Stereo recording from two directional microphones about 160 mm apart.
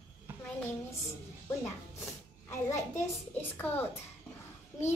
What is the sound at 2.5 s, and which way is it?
A woman's voice, 20° left (ahead or behind).